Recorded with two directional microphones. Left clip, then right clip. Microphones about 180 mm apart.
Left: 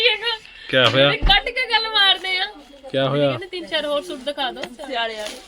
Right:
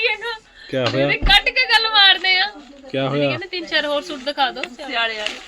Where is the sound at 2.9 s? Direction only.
5° right (ahead or behind).